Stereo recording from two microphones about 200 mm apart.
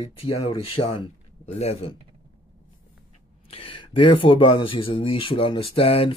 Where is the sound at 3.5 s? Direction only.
25° left (ahead or behind).